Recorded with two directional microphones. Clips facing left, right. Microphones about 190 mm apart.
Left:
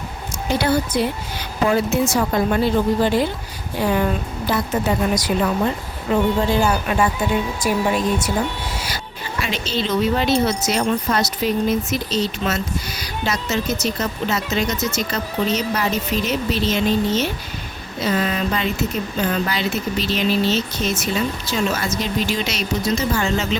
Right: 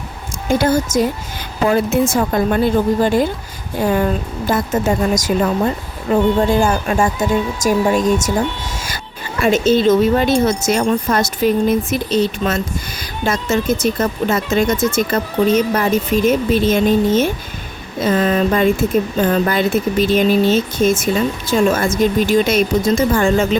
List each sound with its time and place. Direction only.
0.4 s speech: 50° right (ahead or behind)
6.5 s speech: 50° right (ahead or behind)
9.4 s speech: 50° right (ahead or behind)